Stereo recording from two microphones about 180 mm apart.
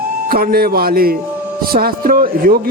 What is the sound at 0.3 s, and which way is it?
A man's voice, 55° right (ahead or behind).